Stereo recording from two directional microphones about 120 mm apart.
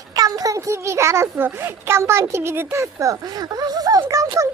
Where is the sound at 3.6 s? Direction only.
30° right (ahead or behind).